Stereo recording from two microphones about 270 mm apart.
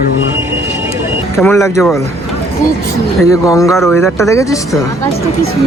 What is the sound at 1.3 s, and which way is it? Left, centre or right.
Speech, centre.